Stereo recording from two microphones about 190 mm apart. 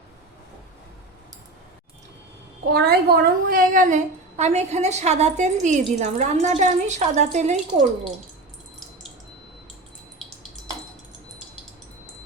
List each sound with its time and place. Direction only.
2.6 s a woman's voice: 55° right (ahead or behind); by 7.9 s 40° right (ahead or behind)